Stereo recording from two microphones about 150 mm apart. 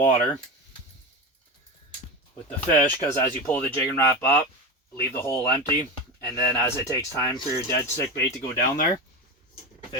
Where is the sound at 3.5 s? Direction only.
15° left (ahead or behind).